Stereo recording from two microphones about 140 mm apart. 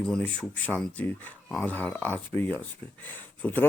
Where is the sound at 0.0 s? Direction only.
5° left (ahead or behind).